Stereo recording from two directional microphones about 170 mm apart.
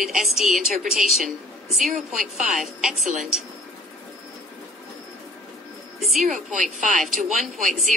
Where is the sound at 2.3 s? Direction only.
5° right (ahead or behind).